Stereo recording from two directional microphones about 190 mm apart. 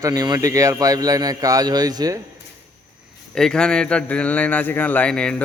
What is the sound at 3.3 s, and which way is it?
A man's voice, 5° left (ahead or behind).